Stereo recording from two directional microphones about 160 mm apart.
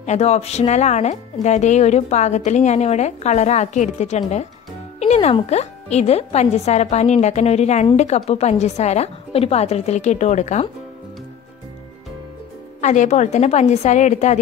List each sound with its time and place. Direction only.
0.0 s speech: 45° left (ahead or behind)
12.8 s speech: 50° left (ahead or behind)